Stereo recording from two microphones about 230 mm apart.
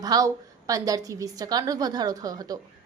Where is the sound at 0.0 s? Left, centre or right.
Centre.